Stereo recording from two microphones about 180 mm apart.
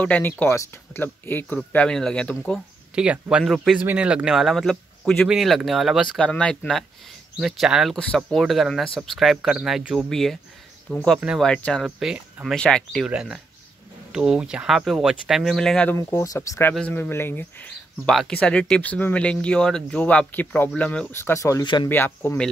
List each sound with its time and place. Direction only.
0.0 s speech: 10° left (ahead or behind)
2.9 s speech: 5° right (ahead or behind); by 22.5 s 10° left (ahead or behind)